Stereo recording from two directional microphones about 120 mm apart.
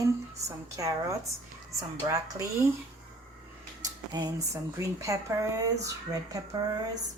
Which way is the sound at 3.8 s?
30° right (ahead or behind).